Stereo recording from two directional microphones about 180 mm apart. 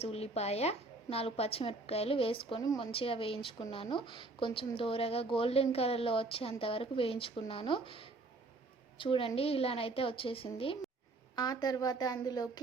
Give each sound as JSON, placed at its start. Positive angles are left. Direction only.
{"t": 0.0, "sound": "a woman's voice", "side_deg": 35}